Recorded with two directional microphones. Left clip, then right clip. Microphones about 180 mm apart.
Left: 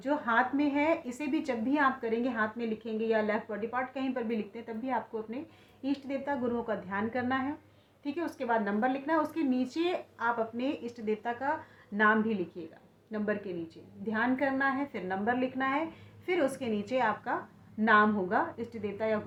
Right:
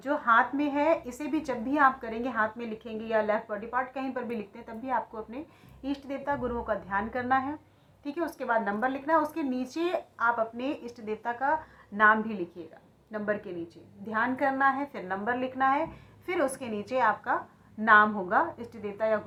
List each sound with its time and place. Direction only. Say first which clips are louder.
0.0 s a woman's voice: right 4 dB; 35° left (ahead or behind)
14.1 s a woman's voice: right 2 dB; 40° left (ahead or behind)